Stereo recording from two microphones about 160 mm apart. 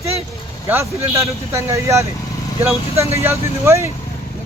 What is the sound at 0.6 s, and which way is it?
A man's voice, 15° right (ahead or behind).